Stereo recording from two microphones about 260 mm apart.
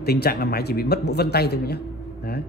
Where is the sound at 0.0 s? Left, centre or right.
Left.